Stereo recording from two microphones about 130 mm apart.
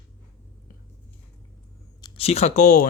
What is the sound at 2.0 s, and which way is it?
Speech, 45° left (ahead or behind).